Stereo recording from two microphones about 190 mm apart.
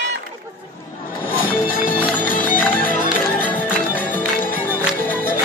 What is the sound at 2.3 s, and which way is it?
Music, 45° left (ahead or behind).